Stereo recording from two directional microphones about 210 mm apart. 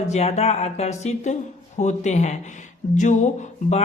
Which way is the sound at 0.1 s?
30° left (ahead or behind).